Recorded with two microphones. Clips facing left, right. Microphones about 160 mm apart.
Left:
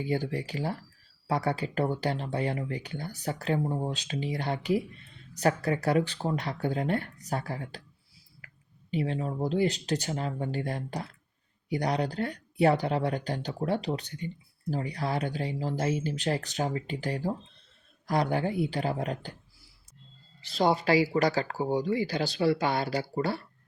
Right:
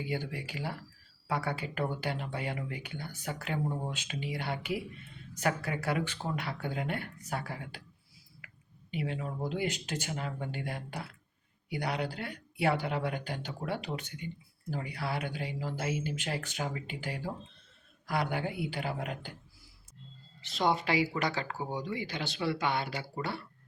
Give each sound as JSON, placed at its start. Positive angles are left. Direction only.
{"t": 0.0, "sound": "speech", "side_deg": 35}
{"t": 8.9, "sound": "speech", "side_deg": 35}
{"t": 20.5, "sound": "speech", "side_deg": 35}